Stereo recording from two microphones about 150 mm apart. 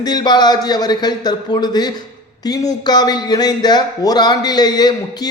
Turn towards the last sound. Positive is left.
turn(degrees=25)  # may be behind; listen again after turning